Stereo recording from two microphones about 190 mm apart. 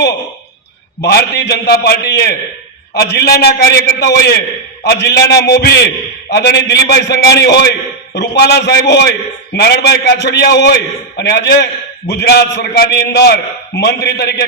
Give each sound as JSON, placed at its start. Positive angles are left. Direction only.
{"t": 1.0, "sound": "a man's voice", "side_deg": 60}